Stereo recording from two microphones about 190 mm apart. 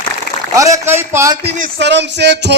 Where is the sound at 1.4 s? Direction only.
65° right (ahead or behind).